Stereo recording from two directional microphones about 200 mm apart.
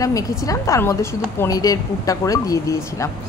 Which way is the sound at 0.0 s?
15° left (ahead or behind).